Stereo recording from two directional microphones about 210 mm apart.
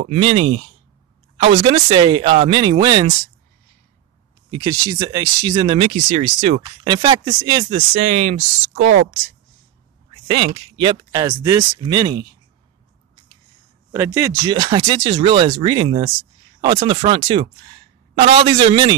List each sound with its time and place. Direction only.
0.0 s speech: 30° right (ahead or behind)
4.6 s speech: 15° right (ahead or behind); by 6.6 s 35° right (ahead or behind)
6.6 s speech: 20° right (ahead or behind)
7.9 s speech: 30° right (ahead or behind)
10.2 s speech: 25° right (ahead or behind)
13.9 s speech: 10° right (ahead or behind)